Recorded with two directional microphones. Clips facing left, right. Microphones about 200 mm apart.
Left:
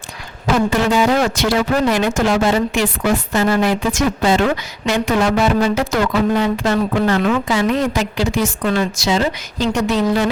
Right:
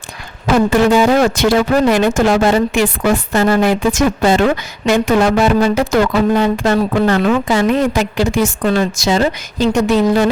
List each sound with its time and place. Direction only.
0.7 s speech: 50° right (ahead or behind)
7.5 s speech: 50° right (ahead or behind)